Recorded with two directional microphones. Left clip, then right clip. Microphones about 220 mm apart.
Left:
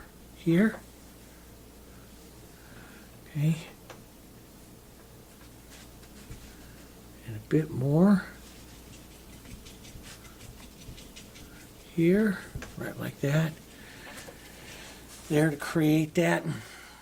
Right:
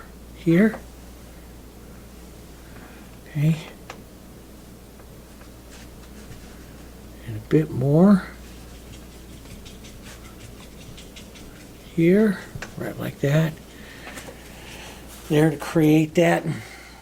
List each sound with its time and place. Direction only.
0.4 s speech: 45° left (ahead or behind)
3.3 s speech: 50° left (ahead or behind)
7.4 s speech: 50° left (ahead or behind)
11.9 s speech: 50° left (ahead or behind)
15.3 s speech: 45° left (ahead or behind)